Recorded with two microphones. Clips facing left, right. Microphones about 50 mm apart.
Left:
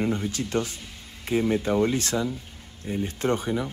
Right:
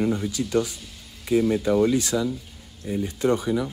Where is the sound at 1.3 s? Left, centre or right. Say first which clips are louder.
Right 3 dB; left.